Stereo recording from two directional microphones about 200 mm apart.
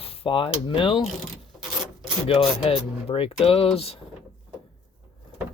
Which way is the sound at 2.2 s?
30° left (ahead or behind).